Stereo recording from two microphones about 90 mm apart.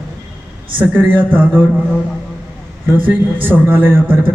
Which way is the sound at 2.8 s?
20° right (ahead or behind).